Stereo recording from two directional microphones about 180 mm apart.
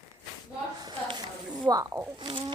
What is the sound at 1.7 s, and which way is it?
Speech, 20° right (ahead or behind).